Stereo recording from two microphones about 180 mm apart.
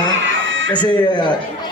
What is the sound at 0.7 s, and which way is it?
Speech, 25° left (ahead or behind).